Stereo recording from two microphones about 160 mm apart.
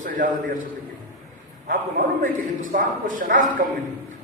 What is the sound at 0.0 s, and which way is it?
Speech, 55° right (ahead or behind).